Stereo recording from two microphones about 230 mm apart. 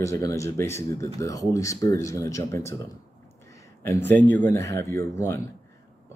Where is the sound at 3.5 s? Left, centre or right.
Centre.